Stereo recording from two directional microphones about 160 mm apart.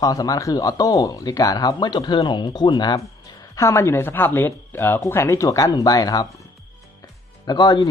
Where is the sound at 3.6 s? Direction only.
15° left (ahead or behind).